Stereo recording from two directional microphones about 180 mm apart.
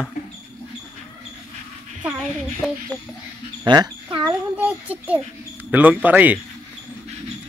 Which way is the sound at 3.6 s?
20° right (ahead or behind).